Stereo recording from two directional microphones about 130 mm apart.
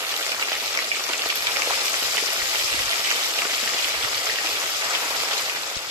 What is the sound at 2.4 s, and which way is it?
Rain, 30° right (ahead or behind).